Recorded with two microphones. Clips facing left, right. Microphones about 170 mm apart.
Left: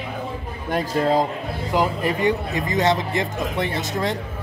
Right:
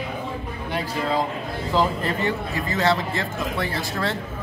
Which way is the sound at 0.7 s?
45° left (ahead or behind).